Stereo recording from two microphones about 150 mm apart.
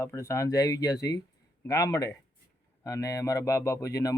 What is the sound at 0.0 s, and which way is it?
Speech, 15° left (ahead or behind).